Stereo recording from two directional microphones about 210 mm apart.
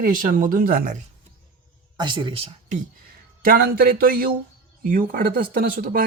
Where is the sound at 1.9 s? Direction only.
20° right (ahead or behind).